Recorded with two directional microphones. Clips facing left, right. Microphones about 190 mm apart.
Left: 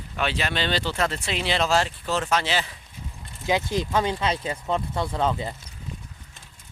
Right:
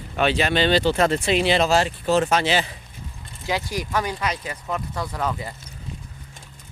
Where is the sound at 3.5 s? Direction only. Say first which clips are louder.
Left 2 dB; 20° left (ahead or behind).